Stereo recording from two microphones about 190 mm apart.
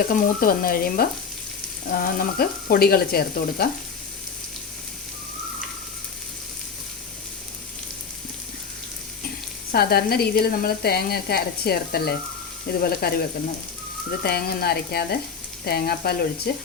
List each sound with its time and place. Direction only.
0.1 s speech: 50° left (ahead or behind)
9.7 s speech: 55° left (ahead or behind)
14.2 s speech: 55° left (ahead or behind)